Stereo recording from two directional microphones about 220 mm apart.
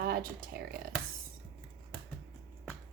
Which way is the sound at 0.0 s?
45° right (ahead or behind).